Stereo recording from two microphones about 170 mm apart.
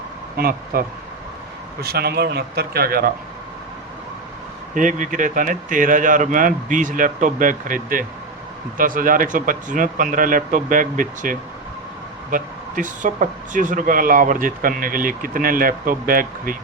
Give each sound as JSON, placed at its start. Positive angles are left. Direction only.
{"t": 0.3, "sound": "speech", "side_deg": -60}
{"t": 4.7, "sound": "speech", "side_deg": -50}